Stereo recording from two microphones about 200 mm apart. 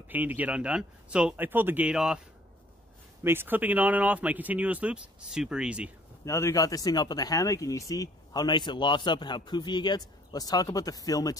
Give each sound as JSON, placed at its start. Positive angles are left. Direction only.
{"t": 0.1, "sound": "speech", "side_deg": -10}
{"t": 3.3, "sound": "speech", "side_deg": -10}
{"t": 6.2, "sound": "speech", "side_deg": 15}